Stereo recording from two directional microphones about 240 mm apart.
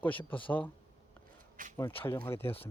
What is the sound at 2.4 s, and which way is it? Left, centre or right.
Speech, left.